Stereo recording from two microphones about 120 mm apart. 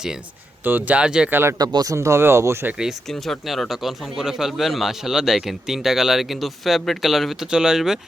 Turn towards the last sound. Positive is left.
turn(degrees=-5)  # may be behind; listen again after turning